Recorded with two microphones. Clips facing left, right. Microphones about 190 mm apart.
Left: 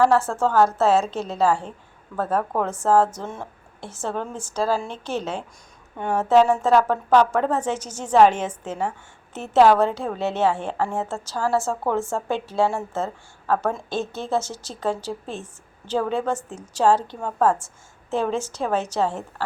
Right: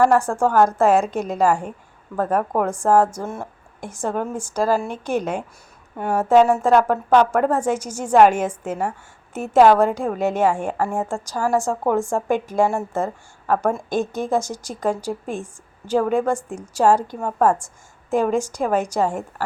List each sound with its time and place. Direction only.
0.0 s a woman's voice: 15° right (ahead or behind)